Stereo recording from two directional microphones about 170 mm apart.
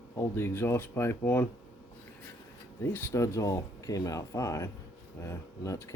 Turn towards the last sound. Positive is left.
turn(degrees=15)  # may be behind; listen again after turning